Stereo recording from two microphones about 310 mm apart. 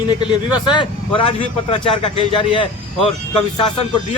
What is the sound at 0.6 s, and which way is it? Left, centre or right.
Speech, centre.